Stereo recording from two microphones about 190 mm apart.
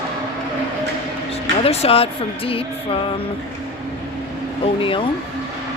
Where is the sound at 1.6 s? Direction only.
30° left (ahead or behind).